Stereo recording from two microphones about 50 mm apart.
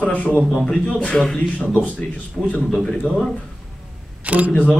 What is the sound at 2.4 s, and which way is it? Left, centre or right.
Speech, centre.